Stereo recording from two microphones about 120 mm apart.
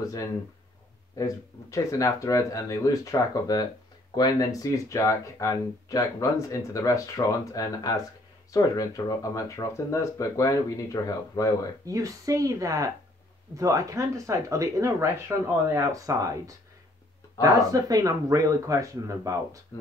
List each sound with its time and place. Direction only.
0.0 s speech: 30° left (ahead or behind)
11.8 s speech: 30° right (ahead or behind)